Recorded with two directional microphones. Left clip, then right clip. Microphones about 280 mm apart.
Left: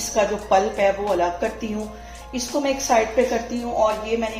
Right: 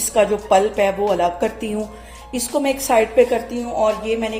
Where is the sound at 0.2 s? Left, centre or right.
Right.